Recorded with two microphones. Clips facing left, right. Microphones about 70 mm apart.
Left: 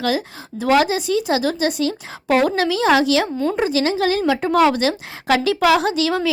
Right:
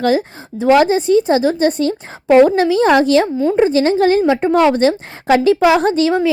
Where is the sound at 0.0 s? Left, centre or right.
Right.